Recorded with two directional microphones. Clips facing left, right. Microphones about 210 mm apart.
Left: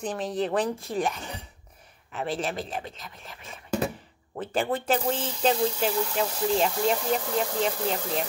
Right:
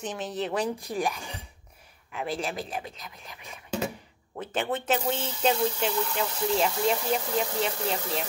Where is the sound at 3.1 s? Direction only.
15° right (ahead or behind).